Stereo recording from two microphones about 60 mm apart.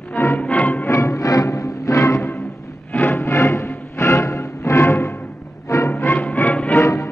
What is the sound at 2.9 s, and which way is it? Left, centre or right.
Music, left.